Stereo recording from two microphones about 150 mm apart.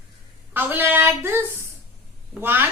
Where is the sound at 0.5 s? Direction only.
15° right (ahead or behind).